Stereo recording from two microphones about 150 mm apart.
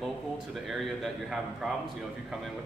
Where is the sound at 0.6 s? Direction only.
Centre (ahead or behind).